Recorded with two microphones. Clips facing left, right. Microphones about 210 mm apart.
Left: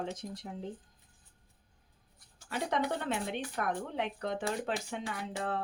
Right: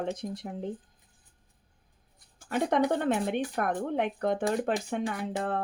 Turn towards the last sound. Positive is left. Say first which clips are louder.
# right 5 dB
turn(degrees=-50)  # may be behind; listen again after turning